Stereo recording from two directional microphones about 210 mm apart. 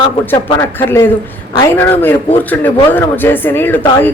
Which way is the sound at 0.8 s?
10° left (ahead or behind).